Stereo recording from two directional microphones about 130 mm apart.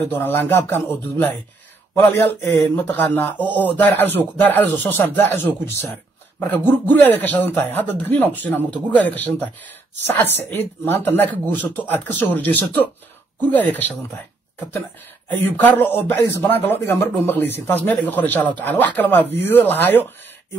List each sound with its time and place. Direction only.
0.1 s speech: 15° left (ahead or behind)
15.4 s speech: 15° left (ahead or behind)